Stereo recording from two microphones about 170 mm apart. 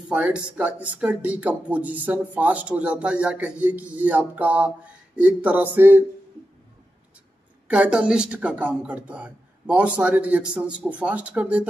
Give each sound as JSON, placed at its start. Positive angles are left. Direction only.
{"t": 0.1, "sound": "speech", "side_deg": -10}
{"t": 7.6, "sound": "speech", "side_deg": -5}